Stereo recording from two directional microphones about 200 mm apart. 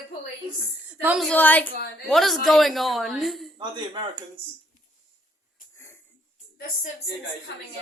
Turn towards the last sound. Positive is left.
turn(degrees=10)  # may be behind; listen again after turning